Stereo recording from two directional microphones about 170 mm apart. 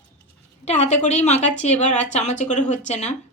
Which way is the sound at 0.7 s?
40° left (ahead or behind).